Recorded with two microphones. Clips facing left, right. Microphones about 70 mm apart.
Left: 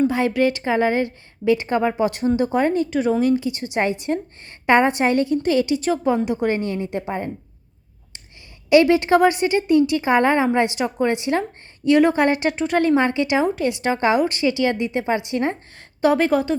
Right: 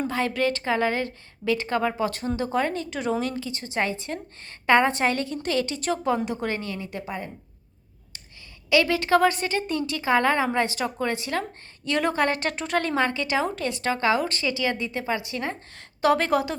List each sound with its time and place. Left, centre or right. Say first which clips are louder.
0.1 s speech: left 6 dB; centre
3.2 s speech: left 10 dB; centre
4.1 s a woman's voice: left 9 dB; left; by 6.5 s centre
6.5 s a woman's voice: left 8 dB; left
8.7 s a woman's voice: left 6 dB; left
11.9 s speech: left 8 dB; centre
12.5 s speech: left 5 dB; centre
13.0 s a woman's voice: left 5 dB; left
16.0 s a woman's voice: left 4 dB; centre